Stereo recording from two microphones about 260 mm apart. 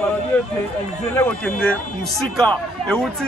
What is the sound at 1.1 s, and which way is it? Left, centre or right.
Speech, centre.